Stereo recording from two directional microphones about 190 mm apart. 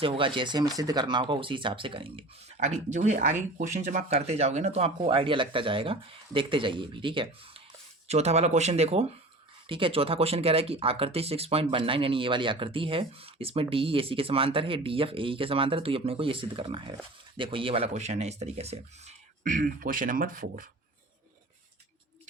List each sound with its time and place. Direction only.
0.0 s speech: 25° right (ahead or behind)
19.4 s speech: 50° right (ahead or behind)